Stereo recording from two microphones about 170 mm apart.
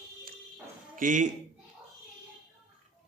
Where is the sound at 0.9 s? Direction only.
50° right (ahead or behind).